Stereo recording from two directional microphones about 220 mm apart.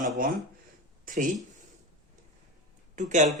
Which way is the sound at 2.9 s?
35° right (ahead or behind).